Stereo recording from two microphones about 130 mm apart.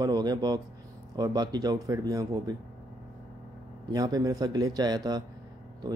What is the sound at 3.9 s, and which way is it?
Speech, 30° right (ahead or behind).